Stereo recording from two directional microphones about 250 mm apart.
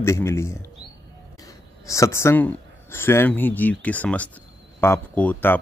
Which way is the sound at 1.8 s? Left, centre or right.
Centre.